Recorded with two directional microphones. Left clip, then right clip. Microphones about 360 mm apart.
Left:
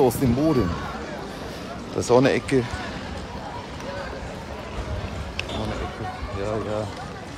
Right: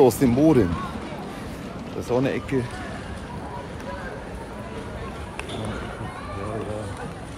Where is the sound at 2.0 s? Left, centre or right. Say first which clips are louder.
Left 6 dB; left.